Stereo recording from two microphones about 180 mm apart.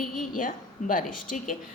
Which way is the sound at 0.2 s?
50° left (ahead or behind).